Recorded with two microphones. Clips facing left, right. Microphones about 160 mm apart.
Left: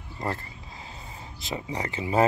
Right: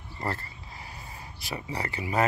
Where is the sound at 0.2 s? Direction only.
20° left (ahead or behind).